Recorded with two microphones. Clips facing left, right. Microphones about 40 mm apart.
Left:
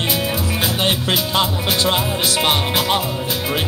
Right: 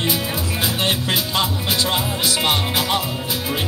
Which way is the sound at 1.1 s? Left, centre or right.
Left.